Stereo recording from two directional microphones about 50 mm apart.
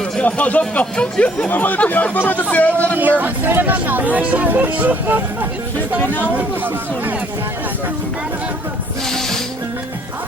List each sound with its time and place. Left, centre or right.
0.0 s speech: left
3.0 s speech: right
9.0 s music: centre